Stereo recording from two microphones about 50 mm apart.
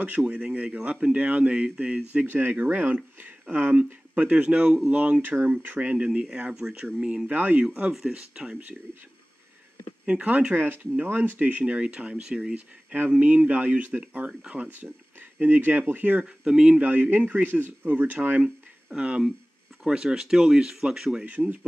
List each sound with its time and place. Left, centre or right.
0.0 s speech: right
2.5 s speech: right
6.0 s speech: centre
7.2 s speech: right
8.1 s speech: centre
10.0 s speech: right
11.6 s speech: right
13.2 s speech: right
16.4 s speech: centre
16.8 s speech: right
18.4 s speech: right
21.3 s speech: right